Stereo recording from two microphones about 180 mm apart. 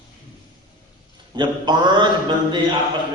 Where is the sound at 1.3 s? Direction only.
25° right (ahead or behind).